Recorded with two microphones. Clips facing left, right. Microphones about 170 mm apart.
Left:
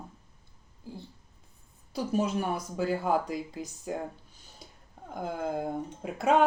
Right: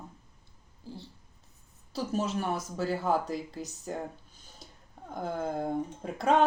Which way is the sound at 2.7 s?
10° left (ahead or behind).